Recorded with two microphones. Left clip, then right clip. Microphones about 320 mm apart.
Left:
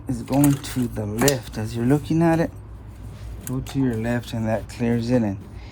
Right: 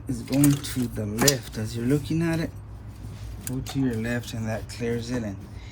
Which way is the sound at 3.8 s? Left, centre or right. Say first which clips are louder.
Left 4 dB; centre.